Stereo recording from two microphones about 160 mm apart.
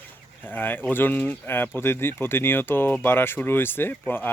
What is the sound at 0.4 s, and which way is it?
Speech, 10° left (ahead or behind).